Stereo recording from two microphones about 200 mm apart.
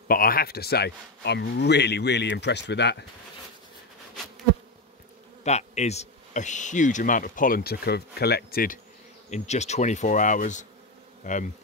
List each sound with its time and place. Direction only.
0.1 s speech: 45° left (ahead or behind)
5.4 s speech: 35° left (ahead or behind)
9.3 s speech: 35° left (ahead or behind)